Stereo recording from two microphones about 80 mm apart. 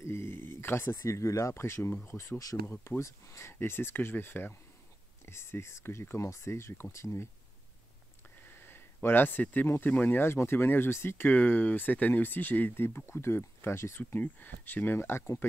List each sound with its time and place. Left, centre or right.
0.0 s speech: left
2.6 s speech: left
8.4 s speech: left